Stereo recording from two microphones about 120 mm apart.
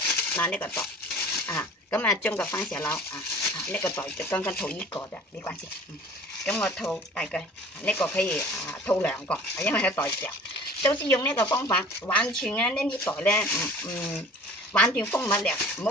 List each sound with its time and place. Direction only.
0.3 s speech: 15° left (ahead or behind)
6.4 s speech: 5° left (ahead or behind)
10.8 s speech: 40° left (ahead or behind)
11.1 s speech: 30° left (ahead or behind)
11.7 s speech: 10° left (ahead or behind)